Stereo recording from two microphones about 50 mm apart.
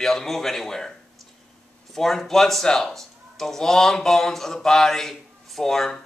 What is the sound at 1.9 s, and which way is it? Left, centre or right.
Speech, centre.